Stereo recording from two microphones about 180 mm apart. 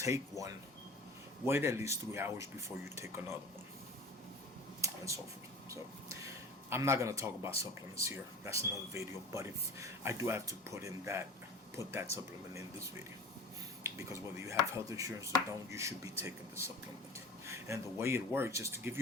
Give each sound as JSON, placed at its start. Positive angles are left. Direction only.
{"t": 0.0, "sound": "speech", "side_deg": -15}
{"t": 4.8, "sound": "a sound", "side_deg": -15}
{"t": 5.7, "sound": "speech", "side_deg": -15}